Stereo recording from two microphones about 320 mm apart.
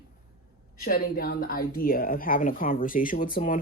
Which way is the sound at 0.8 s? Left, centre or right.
Left.